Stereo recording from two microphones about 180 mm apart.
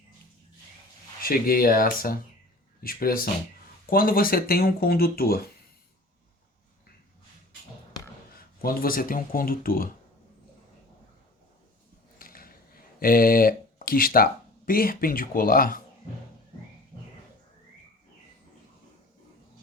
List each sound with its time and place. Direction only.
1.2 s speech: 55° left (ahead or behind)
8.6 s speech: 55° left (ahead or behind)
12.2 s a sound: 55° left (ahead or behind)
13.0 s speech: 55° left (ahead or behind)